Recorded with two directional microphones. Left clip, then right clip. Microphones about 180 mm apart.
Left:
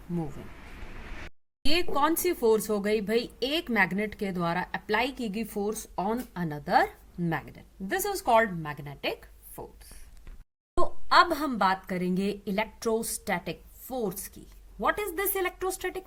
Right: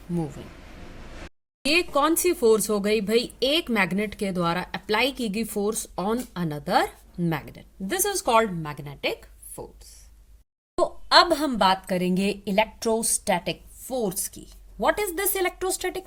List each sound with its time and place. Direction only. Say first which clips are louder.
1.6 s speech: right 5 dB; 10° right (ahead or behind)